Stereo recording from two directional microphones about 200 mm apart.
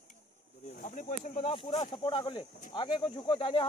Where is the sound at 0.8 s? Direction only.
40° left (ahead or behind).